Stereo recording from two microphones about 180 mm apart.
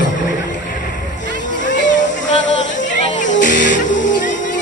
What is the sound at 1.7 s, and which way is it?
Music, 45° left (ahead or behind).